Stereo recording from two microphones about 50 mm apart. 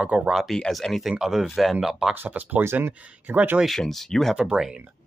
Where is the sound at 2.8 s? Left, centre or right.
Right.